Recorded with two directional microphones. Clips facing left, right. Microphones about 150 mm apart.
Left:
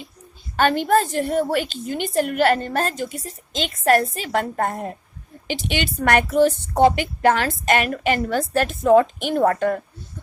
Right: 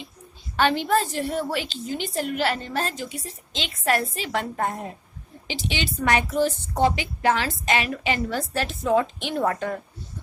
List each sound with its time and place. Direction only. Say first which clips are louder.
0.5 s a woman's voice: left 4 dB; 45° left (ahead or behind)